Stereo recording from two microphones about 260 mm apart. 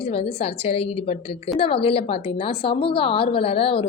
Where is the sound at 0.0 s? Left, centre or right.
Left.